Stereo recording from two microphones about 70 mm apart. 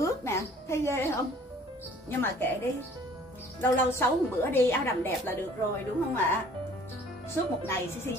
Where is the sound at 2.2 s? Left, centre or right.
Left.